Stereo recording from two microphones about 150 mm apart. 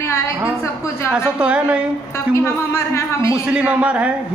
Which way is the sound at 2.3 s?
20° left (ahead or behind).